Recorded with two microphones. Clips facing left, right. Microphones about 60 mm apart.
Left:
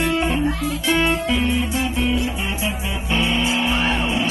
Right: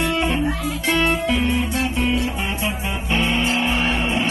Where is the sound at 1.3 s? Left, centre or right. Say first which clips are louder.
Even; right.